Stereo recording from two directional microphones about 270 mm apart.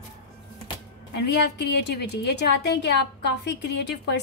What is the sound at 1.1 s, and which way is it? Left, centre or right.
A woman's voice, left.